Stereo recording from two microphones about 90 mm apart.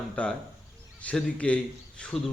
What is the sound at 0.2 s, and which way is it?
A man's voice, 15° left (ahead or behind).